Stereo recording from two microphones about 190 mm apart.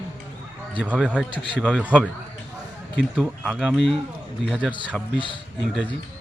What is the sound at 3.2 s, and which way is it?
Speech, centre (ahead or behind).